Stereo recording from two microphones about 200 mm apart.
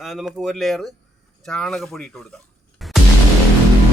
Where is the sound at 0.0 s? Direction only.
Centre (ahead or behind).